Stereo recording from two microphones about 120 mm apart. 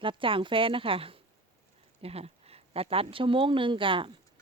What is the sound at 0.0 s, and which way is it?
Speech, 45° right (ahead or behind).